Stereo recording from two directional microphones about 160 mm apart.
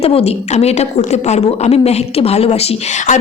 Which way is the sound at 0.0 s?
40° left (ahead or behind).